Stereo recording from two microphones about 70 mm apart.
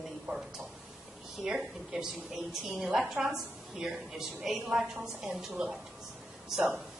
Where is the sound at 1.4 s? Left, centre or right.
Centre.